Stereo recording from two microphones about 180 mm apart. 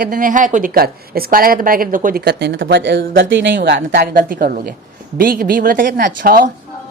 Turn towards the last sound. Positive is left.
turn(degrees=-50)  # may be behind; listen again after turning